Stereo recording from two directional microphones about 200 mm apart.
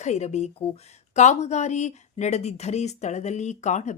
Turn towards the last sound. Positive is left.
turn(degrees=35)  # may be behind; listen again after turning